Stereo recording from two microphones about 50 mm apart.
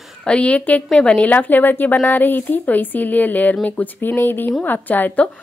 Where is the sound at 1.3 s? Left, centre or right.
Left.